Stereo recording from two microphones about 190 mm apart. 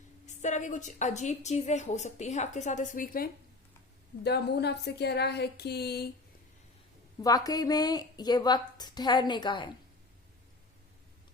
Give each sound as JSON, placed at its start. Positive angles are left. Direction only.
{"t": 0.3, "sound": "a woman's voice", "side_deg": 40}
{"t": 4.2, "sound": "speech", "side_deg": 60}
{"t": 7.2, "sound": "speech", "side_deg": 20}